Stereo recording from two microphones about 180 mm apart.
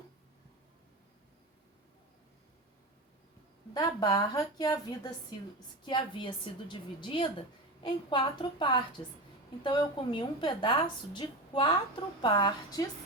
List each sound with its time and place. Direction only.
3.8 s a woman's voice: 20° left (ahead or behind)